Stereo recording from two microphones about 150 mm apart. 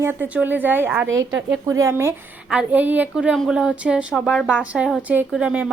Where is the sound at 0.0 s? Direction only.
15° right (ahead or behind).